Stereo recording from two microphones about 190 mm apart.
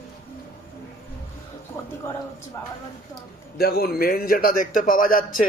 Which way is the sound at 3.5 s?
55° left (ahead or behind).